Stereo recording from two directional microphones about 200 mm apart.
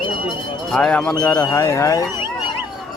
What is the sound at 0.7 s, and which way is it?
Speech, 5° left (ahead or behind).